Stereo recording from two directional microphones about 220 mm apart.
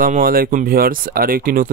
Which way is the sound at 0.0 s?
40° right (ahead or behind).